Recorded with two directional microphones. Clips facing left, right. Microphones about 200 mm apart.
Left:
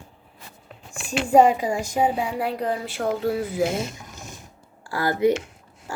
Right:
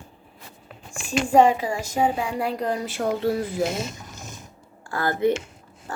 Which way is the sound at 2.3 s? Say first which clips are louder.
Even; 5° left (ahead or behind).